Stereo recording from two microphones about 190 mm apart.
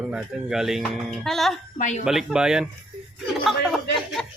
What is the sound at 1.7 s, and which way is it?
Speech, 40° left (ahead or behind).